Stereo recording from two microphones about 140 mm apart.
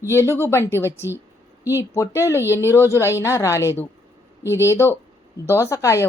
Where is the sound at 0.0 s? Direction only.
20° left (ahead or behind).